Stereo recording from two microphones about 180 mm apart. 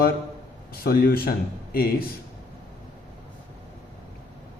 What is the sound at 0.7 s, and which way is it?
A man's voice, 55° left (ahead or behind).